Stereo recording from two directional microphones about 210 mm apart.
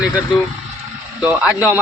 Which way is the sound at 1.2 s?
5° right (ahead or behind).